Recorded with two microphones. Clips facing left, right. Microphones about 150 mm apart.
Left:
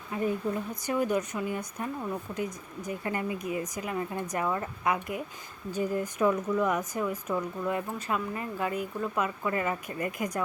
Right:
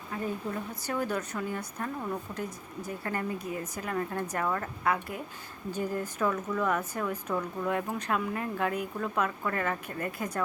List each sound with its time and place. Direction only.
0.1 s speech: 15° left (ahead or behind)